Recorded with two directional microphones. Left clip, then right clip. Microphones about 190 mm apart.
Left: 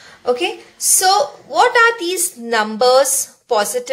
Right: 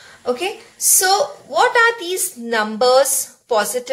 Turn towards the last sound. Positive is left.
turn(degrees=15)  # may be behind; listen again after turning